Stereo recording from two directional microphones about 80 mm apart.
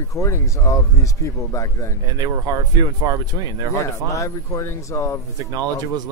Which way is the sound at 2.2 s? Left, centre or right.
Right.